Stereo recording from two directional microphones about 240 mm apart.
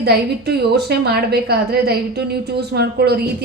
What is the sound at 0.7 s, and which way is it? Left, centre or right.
A woman's voice, right.